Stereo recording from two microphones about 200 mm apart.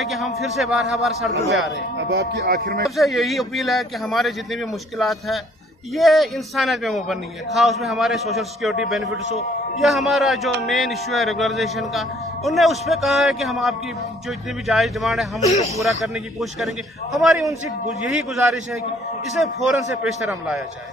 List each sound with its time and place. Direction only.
0.0 s a man's voice: centre (ahead or behind)
2.0 s speech: 60° right (ahead or behind)
3.0 s a man's voice: centre (ahead or behind)